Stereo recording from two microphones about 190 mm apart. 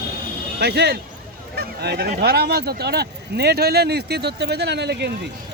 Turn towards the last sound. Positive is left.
turn(degrees=-60)  # may be behind; listen again after turning